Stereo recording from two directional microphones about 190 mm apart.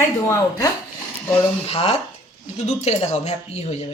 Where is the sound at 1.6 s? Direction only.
30° left (ahead or behind).